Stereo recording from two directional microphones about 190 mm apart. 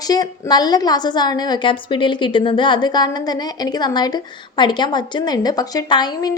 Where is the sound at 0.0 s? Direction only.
20° left (ahead or behind).